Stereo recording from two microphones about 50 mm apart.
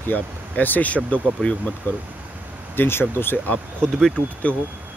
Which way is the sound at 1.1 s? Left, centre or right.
Left.